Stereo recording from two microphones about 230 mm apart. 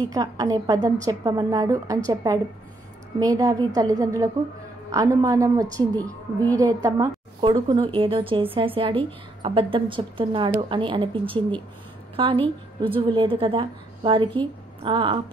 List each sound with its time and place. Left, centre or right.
0.1 s a woman's voice: centre